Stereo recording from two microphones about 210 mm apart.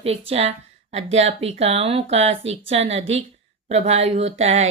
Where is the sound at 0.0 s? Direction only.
30° right (ahead or behind).